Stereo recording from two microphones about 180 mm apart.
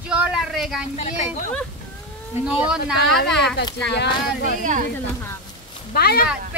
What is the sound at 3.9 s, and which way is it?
Speech, 65° left (ahead or behind).